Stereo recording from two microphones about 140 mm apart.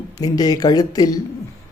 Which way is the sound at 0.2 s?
25° left (ahead or behind).